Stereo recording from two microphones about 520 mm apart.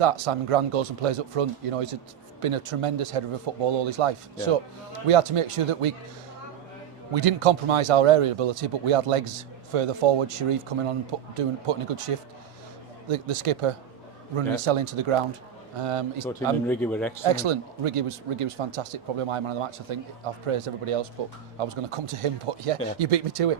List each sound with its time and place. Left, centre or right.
0.0 s speech: right
7.1 s speech: right
13.1 s speech: right
16.2 s a man's voice: centre
17.2 s speech: right